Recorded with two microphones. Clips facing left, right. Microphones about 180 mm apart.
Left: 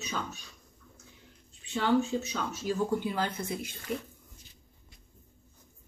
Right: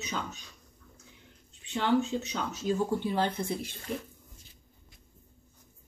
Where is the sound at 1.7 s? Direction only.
20° right (ahead or behind).